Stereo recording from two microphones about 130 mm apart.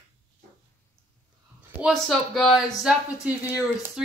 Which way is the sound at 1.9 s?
Centre (ahead or behind).